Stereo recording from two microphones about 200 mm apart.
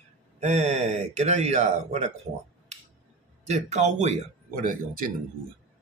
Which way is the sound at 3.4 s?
35° right (ahead or behind).